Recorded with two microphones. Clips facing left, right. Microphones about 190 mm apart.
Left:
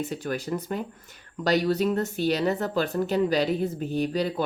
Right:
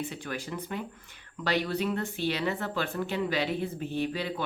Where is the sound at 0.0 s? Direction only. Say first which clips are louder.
Left 6 dB; 40° left (ahead or behind).